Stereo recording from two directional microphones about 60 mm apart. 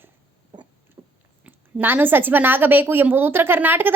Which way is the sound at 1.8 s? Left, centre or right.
Right.